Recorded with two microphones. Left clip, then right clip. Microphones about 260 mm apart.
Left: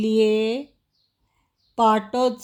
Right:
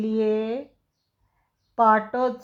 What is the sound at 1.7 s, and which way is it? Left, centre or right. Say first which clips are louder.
Speech: even; left.